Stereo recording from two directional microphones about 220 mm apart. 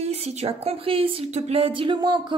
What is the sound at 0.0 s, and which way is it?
A woman's voice, 30° right (ahead or behind).